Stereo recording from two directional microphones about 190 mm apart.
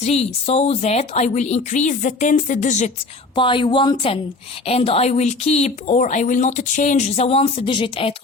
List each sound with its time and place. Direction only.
0.0 s speech: 35° left (ahead or behind)
3.3 s speech: 25° left (ahead or behind)